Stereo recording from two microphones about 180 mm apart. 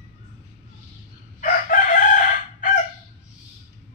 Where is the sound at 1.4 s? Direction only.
45° left (ahead or behind).